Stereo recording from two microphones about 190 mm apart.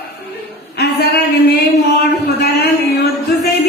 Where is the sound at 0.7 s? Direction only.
60° left (ahead or behind).